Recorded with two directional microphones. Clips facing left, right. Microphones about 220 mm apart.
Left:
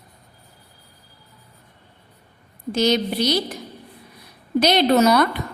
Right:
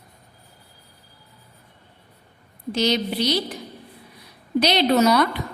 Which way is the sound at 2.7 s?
50° left (ahead or behind).